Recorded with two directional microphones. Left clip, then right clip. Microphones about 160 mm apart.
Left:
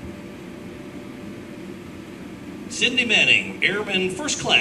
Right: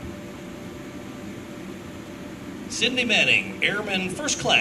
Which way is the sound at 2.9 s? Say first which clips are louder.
Left 3 dB; 40° right (ahead or behind).